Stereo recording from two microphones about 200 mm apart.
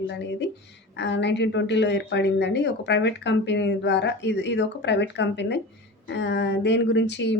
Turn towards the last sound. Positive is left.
turn(degrees=60)  # may be behind; listen again after turning